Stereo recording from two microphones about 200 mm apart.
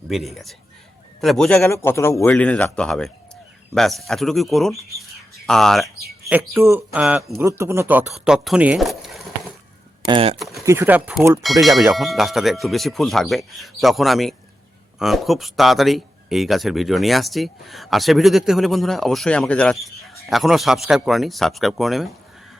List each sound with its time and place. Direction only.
0.1 s speech: centre (ahead or behind)
6.5 s speech: 15° right (ahead or behind)
7.3 s speech: 15° right (ahead or behind)
10.1 s speech: 25° right (ahead or behind)
10.3 s speech: centre (ahead or behind)
10.7 s speech: 10° right (ahead or behind)